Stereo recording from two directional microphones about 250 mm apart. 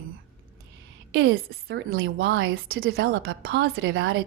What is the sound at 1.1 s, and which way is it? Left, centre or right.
Speech, right.